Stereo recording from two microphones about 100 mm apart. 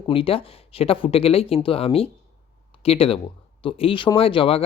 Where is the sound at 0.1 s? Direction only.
65° left (ahead or behind).